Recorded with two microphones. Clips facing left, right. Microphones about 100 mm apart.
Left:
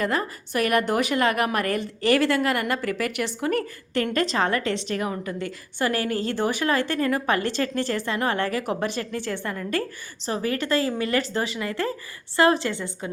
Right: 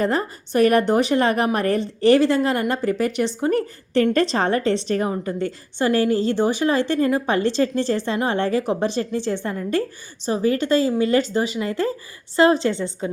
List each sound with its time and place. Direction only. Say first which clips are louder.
0.0 s a woman's voice: right 4 dB; 30° right (ahead or behind)